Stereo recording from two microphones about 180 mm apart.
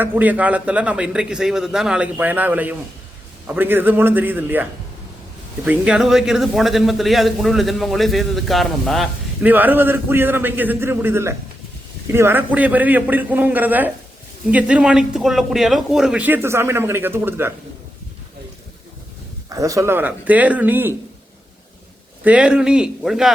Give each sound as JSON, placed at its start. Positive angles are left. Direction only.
{"t": 0.0, "sound": "a man's voice", "side_deg": -10}
{"t": 9.4, "sound": "a man's voice", "side_deg": -10}
{"t": 19.5, "sound": "a man's voice", "side_deg": -20}
{"t": 22.2, "sound": "a man's voice", "side_deg": -5}